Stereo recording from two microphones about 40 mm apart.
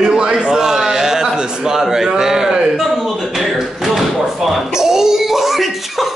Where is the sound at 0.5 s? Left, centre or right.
Centre.